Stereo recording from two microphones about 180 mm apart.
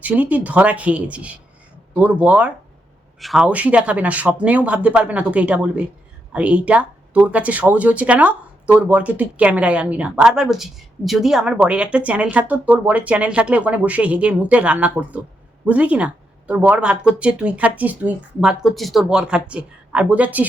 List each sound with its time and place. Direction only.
0.0 s speech: 10° right (ahead or behind)